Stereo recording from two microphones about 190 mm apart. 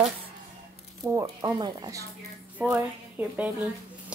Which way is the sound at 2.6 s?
5° right (ahead or behind).